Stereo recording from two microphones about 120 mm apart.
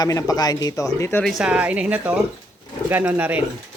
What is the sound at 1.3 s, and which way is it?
Speech, 5° right (ahead or behind).